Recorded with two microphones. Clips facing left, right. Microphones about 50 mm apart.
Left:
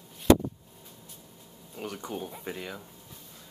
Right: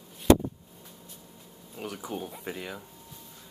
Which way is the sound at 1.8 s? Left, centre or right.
Centre.